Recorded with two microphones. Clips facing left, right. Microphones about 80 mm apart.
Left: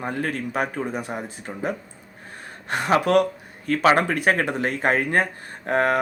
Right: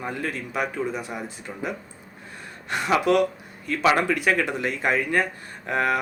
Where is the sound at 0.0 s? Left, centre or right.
Left.